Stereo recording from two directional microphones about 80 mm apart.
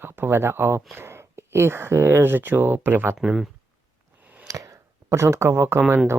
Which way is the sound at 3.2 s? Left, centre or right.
Centre.